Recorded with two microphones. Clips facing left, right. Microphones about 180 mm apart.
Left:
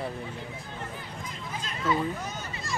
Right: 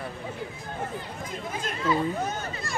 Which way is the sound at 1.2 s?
50° right (ahead or behind).